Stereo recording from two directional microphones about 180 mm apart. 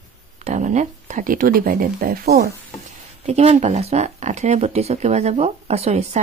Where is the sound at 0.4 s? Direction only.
40° right (ahead or behind); by 2.5 s 60° right (ahead or behind).